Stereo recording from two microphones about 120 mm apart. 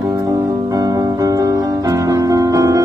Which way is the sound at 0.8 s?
30° right (ahead or behind).